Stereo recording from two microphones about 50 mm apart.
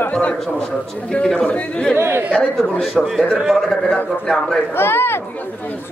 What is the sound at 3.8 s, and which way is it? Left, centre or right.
Speech, centre.